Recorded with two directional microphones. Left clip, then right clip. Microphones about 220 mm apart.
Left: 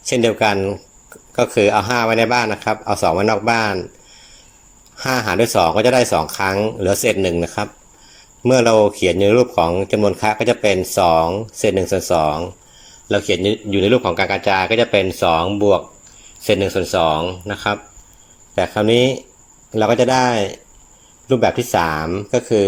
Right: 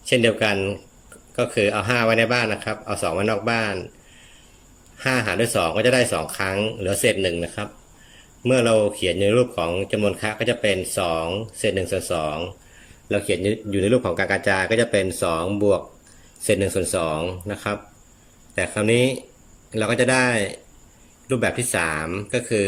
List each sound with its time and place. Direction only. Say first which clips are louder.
0.0 s speech: left 3 dB; 10° left (ahead or behind)
5.1 s speech: left 7 dB; 10° left (ahead or behind)
13.1 s speech: left 5 dB; 5° right (ahead or behind)